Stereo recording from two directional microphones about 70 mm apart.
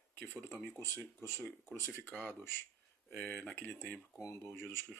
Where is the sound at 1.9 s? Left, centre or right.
Left.